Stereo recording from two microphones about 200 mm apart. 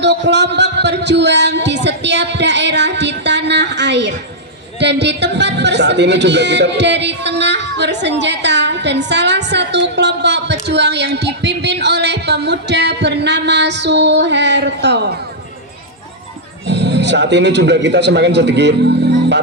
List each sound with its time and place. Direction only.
0.0 s a man's voice: 60° right (ahead or behind)
16.6 s a man's voice: 60° right (ahead or behind)